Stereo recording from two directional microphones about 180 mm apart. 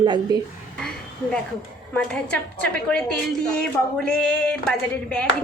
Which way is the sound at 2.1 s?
5° left (ahead or behind).